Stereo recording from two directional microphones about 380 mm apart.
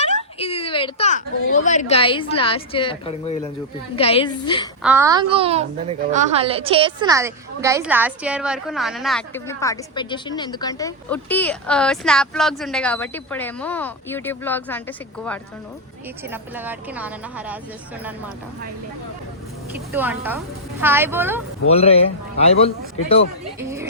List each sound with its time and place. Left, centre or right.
0.0 s a sound: centre
1.6 s a woman's voice: centre
4.8 s a child's voice: centre
19.9 s a woman's voice: centre
21.7 s a woman's voice: centre